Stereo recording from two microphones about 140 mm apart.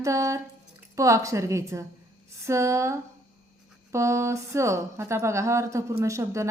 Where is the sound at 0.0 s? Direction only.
20° right (ahead or behind).